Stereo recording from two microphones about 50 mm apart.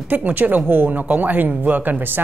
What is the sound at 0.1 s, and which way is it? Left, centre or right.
Speech, right.